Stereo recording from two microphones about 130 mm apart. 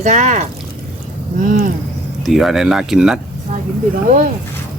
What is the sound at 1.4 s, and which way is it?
Speech, 90° right.